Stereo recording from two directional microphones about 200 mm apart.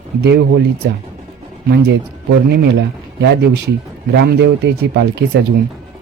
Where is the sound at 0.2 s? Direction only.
55° right (ahead or behind).